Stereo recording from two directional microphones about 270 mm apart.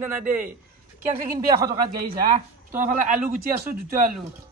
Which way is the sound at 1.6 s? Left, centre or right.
Centre.